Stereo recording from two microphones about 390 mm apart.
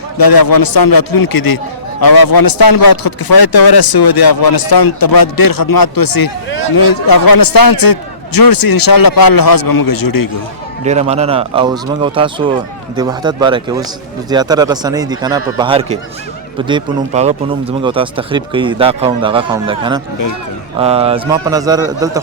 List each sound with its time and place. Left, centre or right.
0.2 s a man's voice: left
10.8 s speech: centre